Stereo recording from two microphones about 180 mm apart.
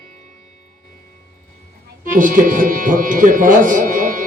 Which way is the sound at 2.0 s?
50° right (ahead or behind).